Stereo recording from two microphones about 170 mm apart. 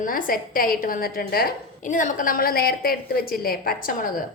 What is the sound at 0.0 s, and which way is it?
A woman's voice, 55° left (ahead or behind).